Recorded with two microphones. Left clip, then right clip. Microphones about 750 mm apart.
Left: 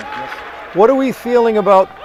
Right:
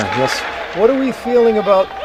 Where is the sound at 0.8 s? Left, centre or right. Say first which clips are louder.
Left 3 dB; left.